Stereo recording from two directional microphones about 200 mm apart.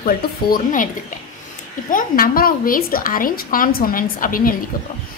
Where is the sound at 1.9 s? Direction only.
45° left (ahead or behind).